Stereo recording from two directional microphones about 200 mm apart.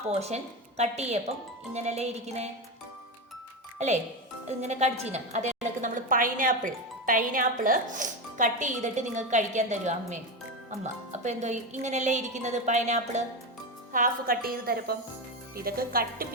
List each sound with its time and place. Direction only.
0.1 s a woman's voice: 30° right (ahead or behind)
3.8 s a woman's voice: 35° right (ahead or behind)